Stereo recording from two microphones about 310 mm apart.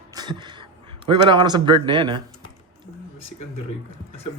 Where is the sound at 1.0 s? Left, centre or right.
Centre.